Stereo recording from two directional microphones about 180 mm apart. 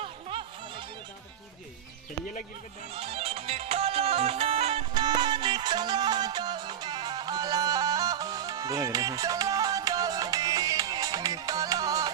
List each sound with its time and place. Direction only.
0.0 s music: 30° right (ahead or behind)
2.9 s music: 35° right (ahead or behind)